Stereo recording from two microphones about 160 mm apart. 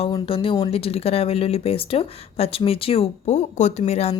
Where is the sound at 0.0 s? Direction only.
35° left (ahead or behind).